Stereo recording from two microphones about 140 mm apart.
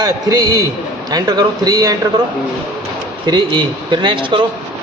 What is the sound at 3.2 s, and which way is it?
A man's voice, 30° right (ahead or behind).